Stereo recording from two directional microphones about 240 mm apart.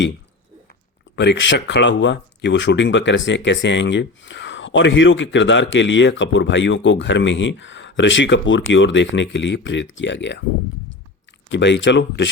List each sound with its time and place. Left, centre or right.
1.1 s speech: left
11.4 s speech: left